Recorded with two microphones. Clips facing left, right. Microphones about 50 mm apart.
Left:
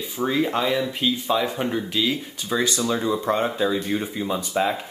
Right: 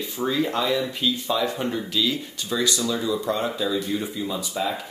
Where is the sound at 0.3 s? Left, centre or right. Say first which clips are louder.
Left 1 dB; centre.